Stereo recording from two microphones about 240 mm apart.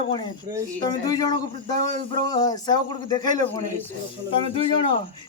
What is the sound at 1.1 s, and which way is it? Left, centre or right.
Speech, centre.